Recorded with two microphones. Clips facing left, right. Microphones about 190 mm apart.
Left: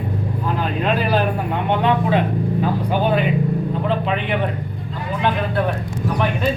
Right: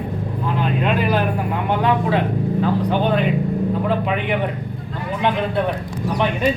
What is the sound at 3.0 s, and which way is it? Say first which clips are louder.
Speech: left 3 dB; 5° left (ahead or behind).